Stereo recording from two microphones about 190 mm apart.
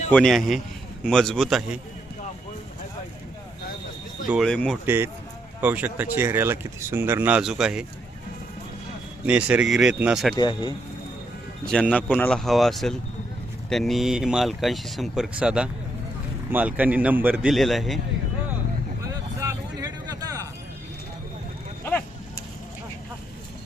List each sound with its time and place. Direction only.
0.1 s speech: 5° left (ahead or behind)
4.3 s speech: centre (ahead or behind)
4.9 s speech: 10° right (ahead or behind)
9.2 s speech: 5° right (ahead or behind)
10.3 s speech: 25° left (ahead or behind)
11.6 s speech: 5° left (ahead or behind)
19.0 s music: 15° right (ahead or behind)